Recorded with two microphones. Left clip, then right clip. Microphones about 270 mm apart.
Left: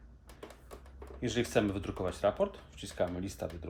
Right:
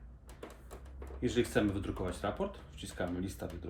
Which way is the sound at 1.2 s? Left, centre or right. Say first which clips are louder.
Left 1 dB; left.